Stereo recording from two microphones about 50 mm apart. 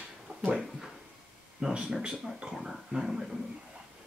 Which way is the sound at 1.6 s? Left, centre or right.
Right.